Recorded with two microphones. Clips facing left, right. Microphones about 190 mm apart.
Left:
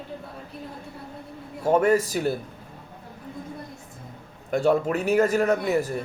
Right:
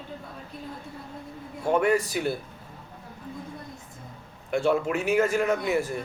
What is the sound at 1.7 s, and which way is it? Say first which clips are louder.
Speech: left 3 dB; 40° left (ahead or behind).